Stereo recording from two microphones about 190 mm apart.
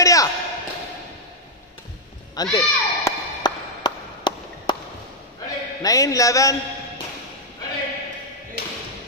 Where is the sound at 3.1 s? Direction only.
20° left (ahead or behind).